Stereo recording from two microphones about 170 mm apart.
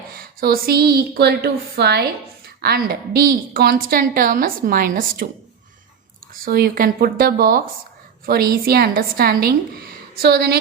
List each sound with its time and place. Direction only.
0.1 s a woman's voice: 60° right (ahead or behind); by 2.0 s 75° right (ahead or behind)
2.6 s a woman's voice: 65° right (ahead or behind)
6.3 s a woman's voice: 60° right (ahead or behind)